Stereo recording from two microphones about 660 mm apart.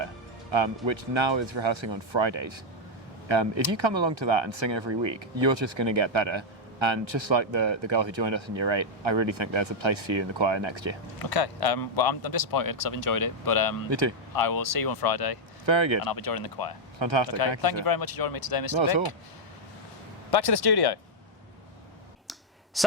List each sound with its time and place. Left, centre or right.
0.9 s speech: right
11.2 s a man's voice: left
15.6 s speech: right
16.0 s speech: left
17.0 s speech: right
17.2 s speech: left
20.3 s speech: left